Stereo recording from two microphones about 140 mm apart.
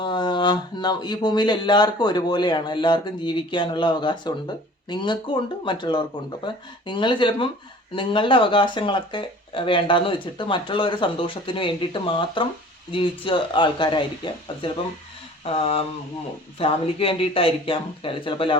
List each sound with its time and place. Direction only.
0.0 s speech: 35° left (ahead or behind)
15.4 s a sound: 45° left (ahead or behind)
16.6 s speech: 40° left (ahead or behind)